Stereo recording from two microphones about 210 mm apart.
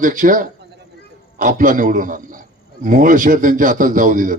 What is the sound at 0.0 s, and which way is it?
A man's voice, 40° right (ahead or behind).